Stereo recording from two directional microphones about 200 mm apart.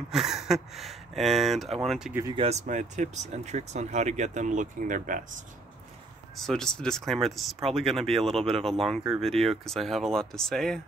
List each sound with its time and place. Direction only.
0.1 s speech: centre (ahead or behind)
2.3 s speech: 30° right (ahead or behind)
6.3 s speech: centre (ahead or behind)